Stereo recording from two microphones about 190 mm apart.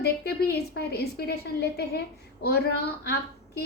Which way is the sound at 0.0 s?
60° left (ahead or behind).